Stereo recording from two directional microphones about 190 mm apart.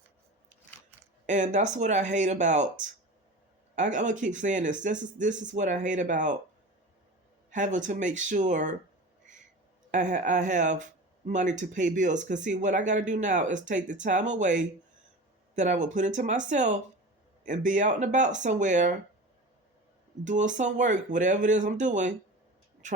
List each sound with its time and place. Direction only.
1.3 s speech: 40° right (ahead or behind)
7.5 s speech: 40° right (ahead or behind)
9.9 s speech: 40° right (ahead or behind)
20.2 s speech: 40° right (ahead or behind)